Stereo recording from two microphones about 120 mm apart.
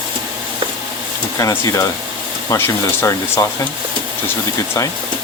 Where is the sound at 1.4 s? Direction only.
25° left (ahead or behind).